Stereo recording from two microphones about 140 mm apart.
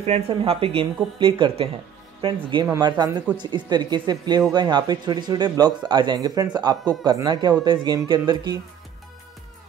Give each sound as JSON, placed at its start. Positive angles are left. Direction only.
{"t": 0.3, "sound": "speech", "side_deg": -40}